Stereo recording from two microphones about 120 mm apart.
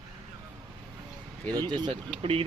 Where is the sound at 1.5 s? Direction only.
35° right (ahead or behind).